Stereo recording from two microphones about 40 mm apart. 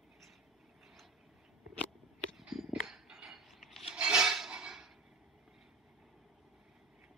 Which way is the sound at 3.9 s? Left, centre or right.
Centre.